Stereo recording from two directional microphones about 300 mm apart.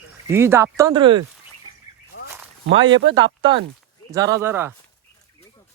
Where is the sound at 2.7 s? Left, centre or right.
Right.